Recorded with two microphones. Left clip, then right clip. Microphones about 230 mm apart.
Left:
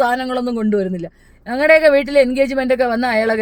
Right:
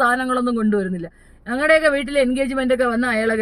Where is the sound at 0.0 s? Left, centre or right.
Centre.